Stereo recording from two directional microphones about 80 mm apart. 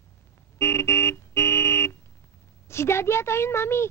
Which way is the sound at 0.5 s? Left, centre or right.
Left.